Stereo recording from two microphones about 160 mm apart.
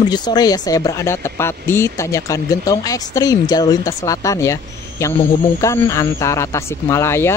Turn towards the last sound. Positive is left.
turn(degrees=15)  # may be behind; listen again after turning